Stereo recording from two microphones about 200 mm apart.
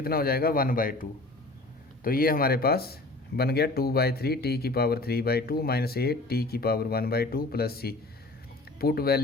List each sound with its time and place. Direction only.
0.0 s speech: 50° left (ahead or behind)
2.0 s speech: 45° left (ahead or behind)